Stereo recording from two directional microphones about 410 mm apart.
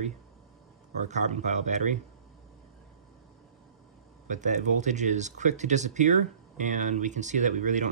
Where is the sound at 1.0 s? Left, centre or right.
Centre.